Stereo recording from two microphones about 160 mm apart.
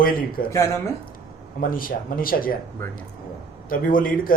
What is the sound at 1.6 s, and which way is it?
Speech, 65° left (ahead or behind).